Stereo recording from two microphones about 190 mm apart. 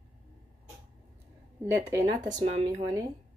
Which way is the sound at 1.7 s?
15° right (ahead or behind).